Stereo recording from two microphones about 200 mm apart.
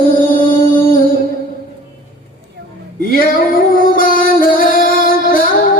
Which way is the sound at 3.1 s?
45° left (ahead or behind).